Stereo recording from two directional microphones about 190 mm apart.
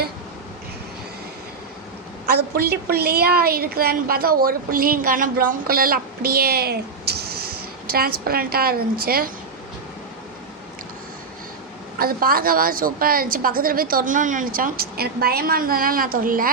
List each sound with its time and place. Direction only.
2.2 s a woman's voice: 55° right (ahead or behind)
11.9 s a woman's voice: 50° right (ahead or behind)